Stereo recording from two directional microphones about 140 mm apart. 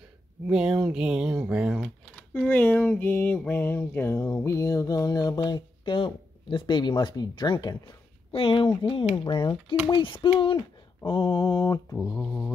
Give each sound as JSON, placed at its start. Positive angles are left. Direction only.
{"t": 0.5, "sound": "speech", "side_deg": -5}
{"t": 2.1, "sound": "speech", "side_deg": 10}
{"t": 3.4, "sound": "a sound", "side_deg": 15}
{"t": 8.3, "sound": "speech", "side_deg": 40}
{"t": 9.2, "sound": "mantra", "side_deg": 40}
{"t": 12.0, "sound": "speech", "side_deg": 5}